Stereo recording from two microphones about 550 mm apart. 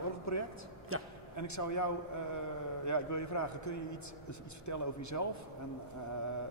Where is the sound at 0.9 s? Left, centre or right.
Right.